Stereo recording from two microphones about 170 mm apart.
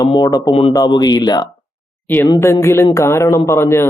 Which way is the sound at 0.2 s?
20° left (ahead or behind).